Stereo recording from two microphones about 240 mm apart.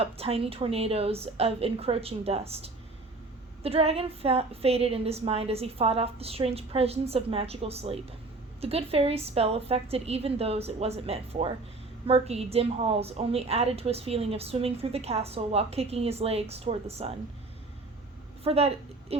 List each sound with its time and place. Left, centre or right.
0.0 s a woman's voice: right
18.4 s a woman's voice: right